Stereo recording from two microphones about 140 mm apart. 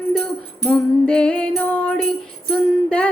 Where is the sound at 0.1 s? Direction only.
5° left (ahead or behind).